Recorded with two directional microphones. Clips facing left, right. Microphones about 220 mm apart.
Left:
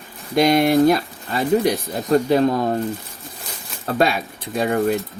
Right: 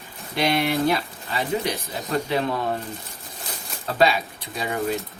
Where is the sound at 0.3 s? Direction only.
45° left (ahead or behind).